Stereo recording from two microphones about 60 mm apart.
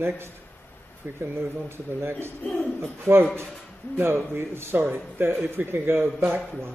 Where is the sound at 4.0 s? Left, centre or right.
Right.